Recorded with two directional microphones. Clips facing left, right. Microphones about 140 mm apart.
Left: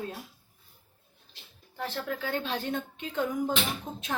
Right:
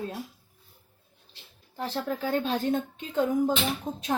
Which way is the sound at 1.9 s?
35° right (ahead or behind).